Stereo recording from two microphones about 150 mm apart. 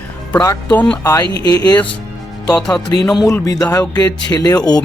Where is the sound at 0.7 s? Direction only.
5° left (ahead or behind).